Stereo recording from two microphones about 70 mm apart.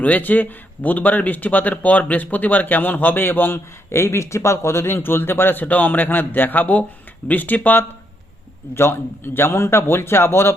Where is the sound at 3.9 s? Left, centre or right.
Left.